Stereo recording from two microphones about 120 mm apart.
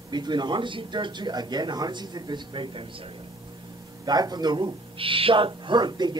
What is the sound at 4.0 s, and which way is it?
Speech, 35° right (ahead or behind).